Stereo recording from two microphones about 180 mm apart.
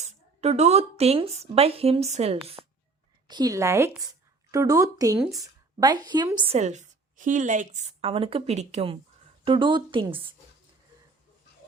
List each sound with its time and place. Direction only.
0.0 s speech: 35° right (ahead or behind)
3.2 s speech: 20° right (ahead or behind)
6.6 s a woman's voice: 40° right (ahead or behind)